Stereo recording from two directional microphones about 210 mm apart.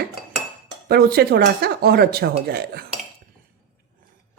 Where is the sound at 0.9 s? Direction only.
50° right (ahead or behind).